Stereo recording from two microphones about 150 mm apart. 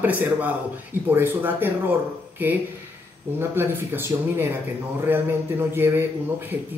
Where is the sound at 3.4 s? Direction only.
15° right (ahead or behind).